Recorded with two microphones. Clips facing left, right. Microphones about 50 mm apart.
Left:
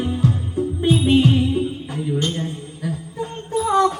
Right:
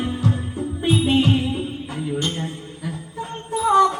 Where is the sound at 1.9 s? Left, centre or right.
Centre.